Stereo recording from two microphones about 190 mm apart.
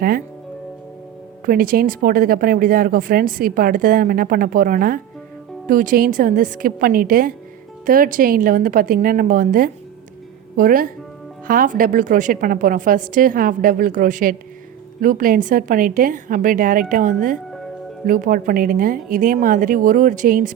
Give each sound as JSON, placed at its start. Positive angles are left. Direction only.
{"t": 1.5, "sound": "speech", "side_deg": -50}